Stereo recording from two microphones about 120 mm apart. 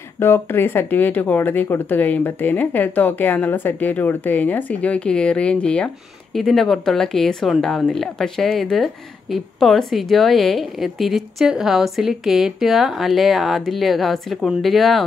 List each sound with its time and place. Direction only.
0.2 s speech: 20° left (ahead or behind); by 15.0 s centre (ahead or behind)